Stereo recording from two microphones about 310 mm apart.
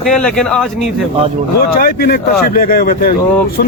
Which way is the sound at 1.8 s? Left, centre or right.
Left.